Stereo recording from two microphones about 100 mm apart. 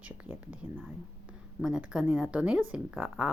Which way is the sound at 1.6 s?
10° right (ahead or behind).